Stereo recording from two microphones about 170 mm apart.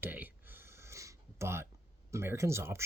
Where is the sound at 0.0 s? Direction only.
10° right (ahead or behind).